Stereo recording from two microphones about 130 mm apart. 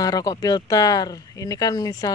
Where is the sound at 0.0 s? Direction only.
30° left (ahead or behind).